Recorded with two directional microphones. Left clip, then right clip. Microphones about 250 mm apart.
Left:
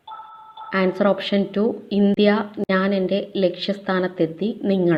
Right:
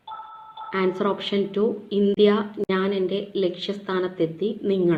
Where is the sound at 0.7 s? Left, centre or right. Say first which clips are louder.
Left 4 dB; left.